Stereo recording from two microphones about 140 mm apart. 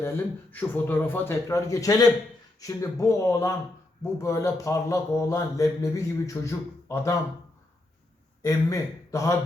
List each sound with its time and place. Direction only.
0.5 s a man's voice: 15° left (ahead or behind)
8.4 s speech: 25° left (ahead or behind)